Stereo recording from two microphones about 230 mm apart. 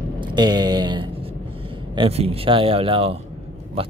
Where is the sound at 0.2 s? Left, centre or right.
Centre.